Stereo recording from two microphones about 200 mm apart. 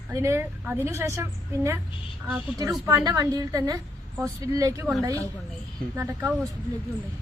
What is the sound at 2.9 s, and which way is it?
A woman's voice, 20° right (ahead or behind).